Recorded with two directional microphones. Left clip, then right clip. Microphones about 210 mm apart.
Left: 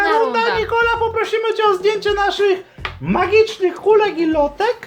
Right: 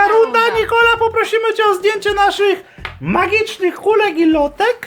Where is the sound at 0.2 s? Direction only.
50° right (ahead or behind).